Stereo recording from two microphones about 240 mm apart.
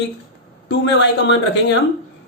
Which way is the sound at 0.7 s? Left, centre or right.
Left.